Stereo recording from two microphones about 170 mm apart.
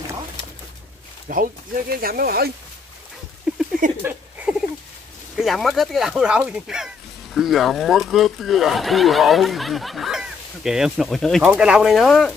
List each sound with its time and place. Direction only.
1.3 s speech: 60° right (ahead or behind)
3.8 s speech: 50° right (ahead or behind)
5.3 s speech: centre (ahead or behind)